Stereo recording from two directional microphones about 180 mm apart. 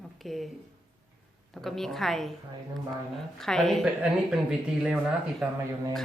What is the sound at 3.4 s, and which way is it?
Speech, centre (ahead or behind).